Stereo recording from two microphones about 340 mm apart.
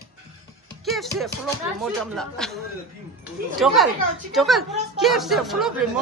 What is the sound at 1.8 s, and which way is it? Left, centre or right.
Speech, centre.